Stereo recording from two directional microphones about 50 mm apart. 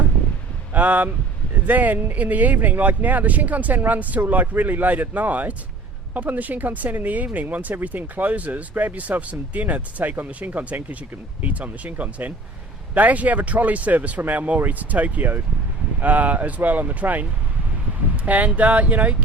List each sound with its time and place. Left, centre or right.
0.7 s speech: right
18.3 s speech: right